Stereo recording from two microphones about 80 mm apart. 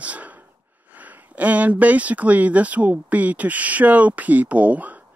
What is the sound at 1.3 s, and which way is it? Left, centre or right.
Speech, centre.